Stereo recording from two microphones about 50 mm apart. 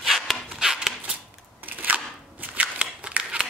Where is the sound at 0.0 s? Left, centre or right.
Centre.